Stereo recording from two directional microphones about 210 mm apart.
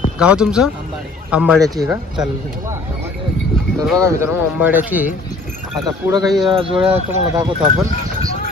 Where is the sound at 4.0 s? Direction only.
15° right (ahead or behind).